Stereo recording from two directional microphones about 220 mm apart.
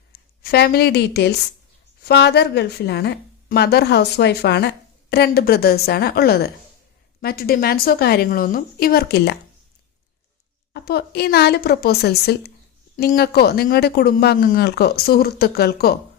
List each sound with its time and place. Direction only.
0.1 s a woman's voice: 45° left (ahead or behind)
10.7 s a woman's voice: 45° left (ahead or behind)